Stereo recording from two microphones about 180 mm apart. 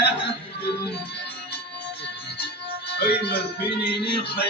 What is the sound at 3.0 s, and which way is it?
Speech, 65° left (ahead or behind).